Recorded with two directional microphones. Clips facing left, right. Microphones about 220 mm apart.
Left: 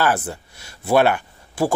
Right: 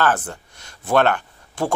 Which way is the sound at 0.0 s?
10° left (ahead or behind).